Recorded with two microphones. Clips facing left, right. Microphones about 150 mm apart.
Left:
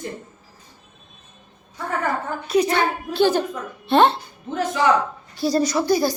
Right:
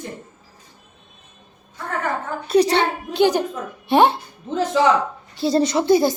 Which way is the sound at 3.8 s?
15° right (ahead or behind).